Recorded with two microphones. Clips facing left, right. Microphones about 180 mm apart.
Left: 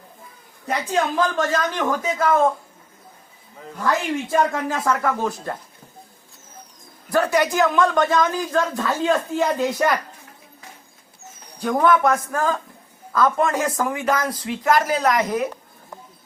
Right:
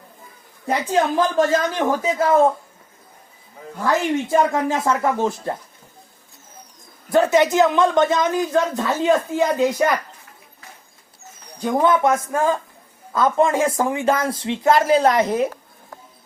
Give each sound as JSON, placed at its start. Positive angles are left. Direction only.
{"t": 0.7, "sound": "speech", "side_deg": -30}
{"t": 4.3, "sound": "speech", "side_deg": -25}
{"t": 7.1, "sound": "speech", "side_deg": -25}
{"t": 11.6, "sound": "speech", "side_deg": -20}